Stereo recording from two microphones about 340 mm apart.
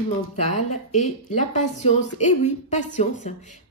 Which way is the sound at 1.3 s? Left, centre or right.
Left.